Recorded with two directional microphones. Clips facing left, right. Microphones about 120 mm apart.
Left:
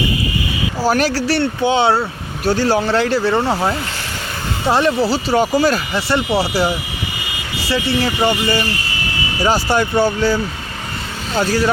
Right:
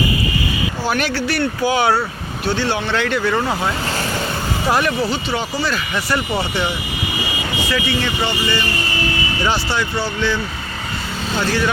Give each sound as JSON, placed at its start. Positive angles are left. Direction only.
{"t": 0.9, "sound": "speech", "side_deg": 35}
{"t": 2.4, "sound": "speech", "side_deg": 40}